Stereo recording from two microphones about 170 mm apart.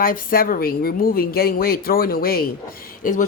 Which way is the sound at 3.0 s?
50° left (ahead or behind).